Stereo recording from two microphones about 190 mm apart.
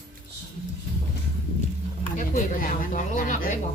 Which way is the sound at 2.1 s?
45° left (ahead or behind).